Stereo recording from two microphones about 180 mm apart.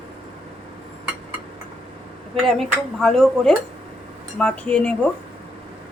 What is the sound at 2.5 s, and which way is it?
A woman's voice, centre (ahead or behind).